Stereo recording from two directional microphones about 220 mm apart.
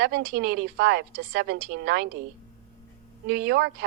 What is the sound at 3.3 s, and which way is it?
Speech, 45° right (ahead or behind).